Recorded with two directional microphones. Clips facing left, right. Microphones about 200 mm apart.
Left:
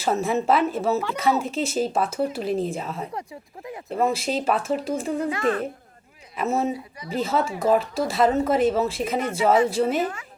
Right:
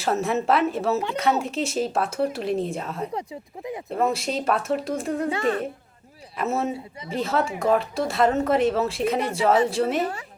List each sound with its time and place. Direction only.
0.0 s speech: centre (ahead or behind)
3.2 s speech: 20° right (ahead or behind)
3.8 s speech: centre (ahead or behind)
5.3 s speech: 30° right (ahead or behind)
6.3 s speech: centre (ahead or behind)
10.0 s speech: 35° right (ahead or behind)